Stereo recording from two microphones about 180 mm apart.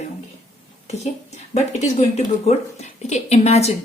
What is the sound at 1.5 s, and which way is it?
A woman's voice, 40° left (ahead or behind).